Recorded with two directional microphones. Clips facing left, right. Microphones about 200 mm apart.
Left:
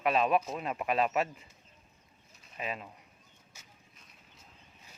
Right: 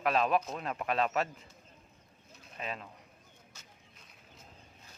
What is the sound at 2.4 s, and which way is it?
Pigeon, 5° left (ahead or behind).